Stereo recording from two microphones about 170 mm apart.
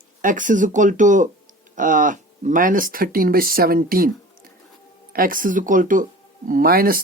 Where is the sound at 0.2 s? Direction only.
50° right (ahead or behind).